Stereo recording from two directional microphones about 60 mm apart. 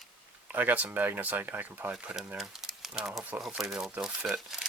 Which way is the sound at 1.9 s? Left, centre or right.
Centre.